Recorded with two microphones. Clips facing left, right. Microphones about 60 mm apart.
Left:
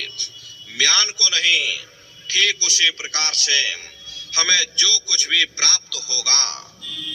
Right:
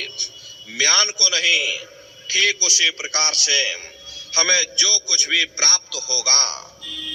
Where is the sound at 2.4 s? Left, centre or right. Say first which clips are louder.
Even; right.